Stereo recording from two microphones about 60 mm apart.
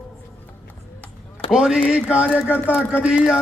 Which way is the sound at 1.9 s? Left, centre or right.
Right.